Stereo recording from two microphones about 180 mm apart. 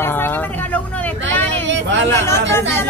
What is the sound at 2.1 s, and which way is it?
Speech, 15° left (ahead or behind).